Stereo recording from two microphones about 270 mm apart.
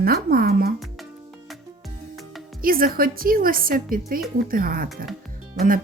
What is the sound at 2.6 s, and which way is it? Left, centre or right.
Speech, right.